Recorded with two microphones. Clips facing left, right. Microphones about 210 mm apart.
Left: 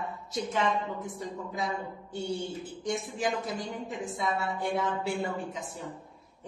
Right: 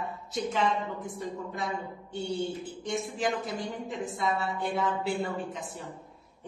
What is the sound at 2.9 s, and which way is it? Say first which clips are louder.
Speech: right 3 dB; centre (ahead or behind).